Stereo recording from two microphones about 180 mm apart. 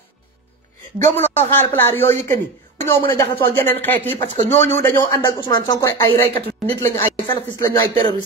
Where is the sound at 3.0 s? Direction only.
25° left (ahead or behind).